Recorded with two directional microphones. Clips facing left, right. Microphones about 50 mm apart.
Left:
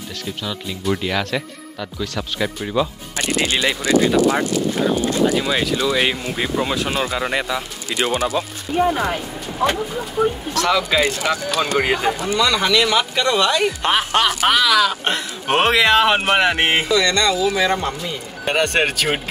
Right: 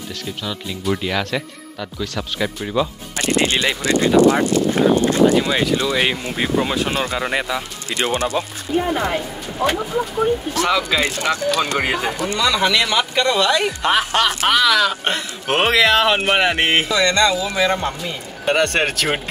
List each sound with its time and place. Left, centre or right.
0.4 s speech: centre
10.8 s speech: centre
16.9 s speech: right
17.3 s speech: centre